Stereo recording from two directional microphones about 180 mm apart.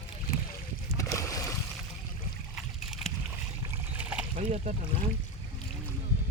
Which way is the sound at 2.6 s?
Centre (ahead or behind).